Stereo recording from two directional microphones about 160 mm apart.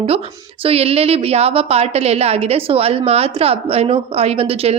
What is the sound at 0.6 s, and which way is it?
A woman's voice, 40° right (ahead or behind).